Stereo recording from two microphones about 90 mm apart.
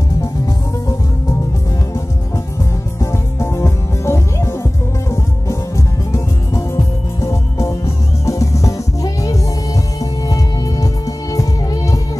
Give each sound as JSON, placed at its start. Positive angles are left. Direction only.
{"t": 3.0, "sound": "music", "side_deg": 30}
{"t": 6.1, "sound": "music", "side_deg": 35}